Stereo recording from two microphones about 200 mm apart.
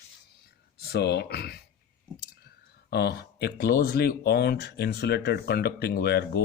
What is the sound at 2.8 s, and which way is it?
Speech, 55° left (ahead or behind).